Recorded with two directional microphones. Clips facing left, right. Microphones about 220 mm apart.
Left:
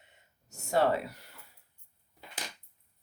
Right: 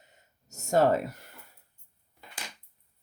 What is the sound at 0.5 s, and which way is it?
Speech, 45° right (ahead or behind).